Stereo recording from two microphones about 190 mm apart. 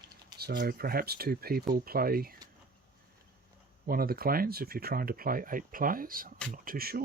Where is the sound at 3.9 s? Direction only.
50° right (ahead or behind).